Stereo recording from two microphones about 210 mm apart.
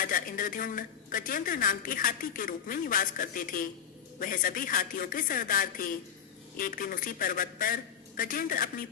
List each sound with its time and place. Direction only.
0.0 s a woman's voice: 40° left (ahead or behind)